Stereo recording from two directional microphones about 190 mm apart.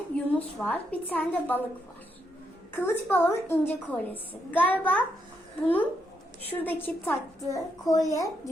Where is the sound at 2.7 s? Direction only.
10° left (ahead or behind).